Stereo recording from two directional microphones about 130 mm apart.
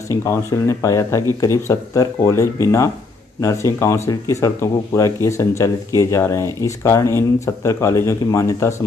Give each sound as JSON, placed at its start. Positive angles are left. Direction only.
{"t": 0.1, "sound": "speech", "side_deg": 25}